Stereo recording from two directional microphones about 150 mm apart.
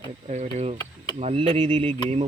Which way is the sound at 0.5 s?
45° right (ahead or behind).